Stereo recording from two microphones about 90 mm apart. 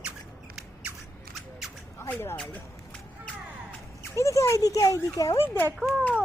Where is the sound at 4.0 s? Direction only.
35° left (ahead or behind).